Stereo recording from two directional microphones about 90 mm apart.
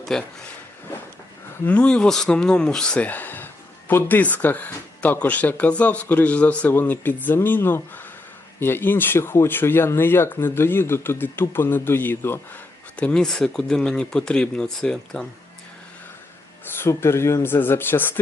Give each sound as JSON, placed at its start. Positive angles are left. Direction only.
{"t": 0.0, "sound": "speech", "side_deg": 5}
{"t": 1.6, "sound": "speech", "side_deg": 15}
{"t": 13.0, "sound": "speech", "side_deg": 10}
{"t": 16.7, "sound": "speech", "side_deg": 30}